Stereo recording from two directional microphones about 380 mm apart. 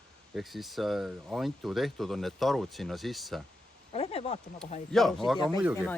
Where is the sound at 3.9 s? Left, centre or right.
Centre.